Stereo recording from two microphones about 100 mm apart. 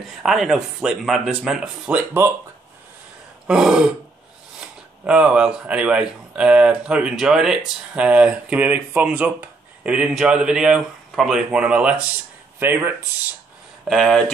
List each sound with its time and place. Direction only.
0.2 s speech: centre (ahead or behind)
3.4 s speech: 5° right (ahead or behind)
12.5 s speech: 20° right (ahead or behind)
13.8 s speech: 5° left (ahead or behind)